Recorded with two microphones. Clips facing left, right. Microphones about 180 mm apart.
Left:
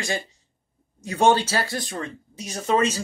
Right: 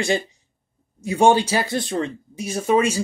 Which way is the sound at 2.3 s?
10° right (ahead or behind).